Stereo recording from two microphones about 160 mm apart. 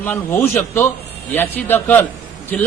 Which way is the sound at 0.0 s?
10° left (ahead or behind).